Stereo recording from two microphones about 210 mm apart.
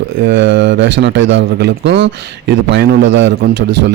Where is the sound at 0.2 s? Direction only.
60° right (ahead or behind).